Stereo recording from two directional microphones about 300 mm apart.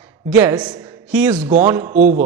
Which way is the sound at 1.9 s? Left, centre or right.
Right.